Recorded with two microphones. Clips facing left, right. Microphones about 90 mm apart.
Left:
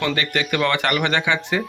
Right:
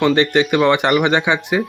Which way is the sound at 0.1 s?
25° right (ahead or behind).